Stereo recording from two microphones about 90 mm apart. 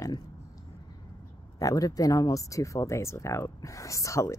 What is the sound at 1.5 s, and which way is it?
Speech, 40° left (ahead or behind).